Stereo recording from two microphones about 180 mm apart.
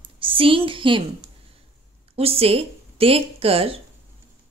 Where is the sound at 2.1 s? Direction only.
35° right (ahead or behind).